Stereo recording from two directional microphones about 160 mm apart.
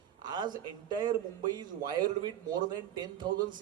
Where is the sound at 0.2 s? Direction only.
25° right (ahead or behind).